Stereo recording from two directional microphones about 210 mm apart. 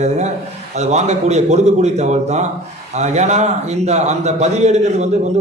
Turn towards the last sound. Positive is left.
turn(degrees=-30)  # may be behind; listen again after turning